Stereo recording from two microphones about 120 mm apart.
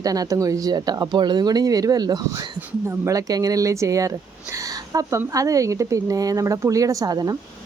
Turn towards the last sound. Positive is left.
turn(degrees=-30)  # may be behind; listen again after turning